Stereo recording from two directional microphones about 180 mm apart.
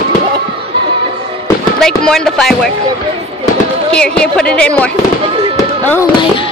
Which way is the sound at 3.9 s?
5° left (ahead or behind).